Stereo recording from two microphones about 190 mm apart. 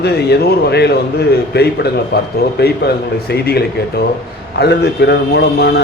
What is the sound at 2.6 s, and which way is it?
Speech, 60° left (ahead or behind).